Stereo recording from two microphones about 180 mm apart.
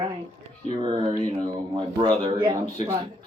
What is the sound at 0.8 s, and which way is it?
Speech, 25° right (ahead or behind).